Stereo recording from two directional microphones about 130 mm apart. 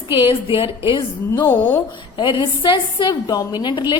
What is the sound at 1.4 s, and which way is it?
Speech, 15° left (ahead or behind).